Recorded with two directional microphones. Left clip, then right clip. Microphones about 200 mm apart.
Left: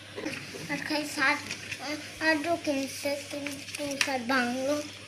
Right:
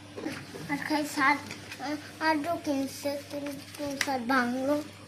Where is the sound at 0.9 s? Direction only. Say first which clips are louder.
Right 1 dB; 45° right (ahead or behind).